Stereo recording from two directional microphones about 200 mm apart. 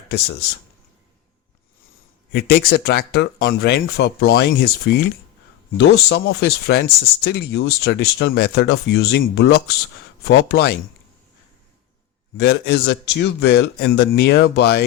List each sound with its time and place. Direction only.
2.3 s speech: 55° left (ahead or behind)
12.4 s speech: 55° left (ahead or behind)